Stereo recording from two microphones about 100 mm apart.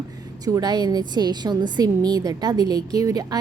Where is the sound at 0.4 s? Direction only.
40° right (ahead or behind).